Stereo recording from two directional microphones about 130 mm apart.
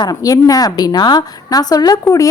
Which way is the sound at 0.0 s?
30° left (ahead or behind).